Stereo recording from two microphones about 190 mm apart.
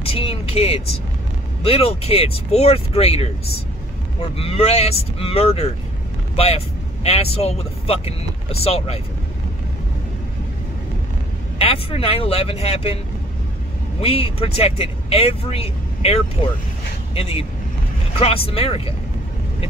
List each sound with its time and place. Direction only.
0.0 s speech: 30° left (ahead or behind)
11.5 s speech: 30° left (ahead or behind)
14.0 s speech: 30° left (ahead or behind)